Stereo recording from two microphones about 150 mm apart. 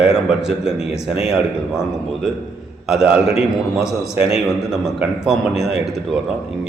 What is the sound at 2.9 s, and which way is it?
A man's voice, 5° right (ahead or behind).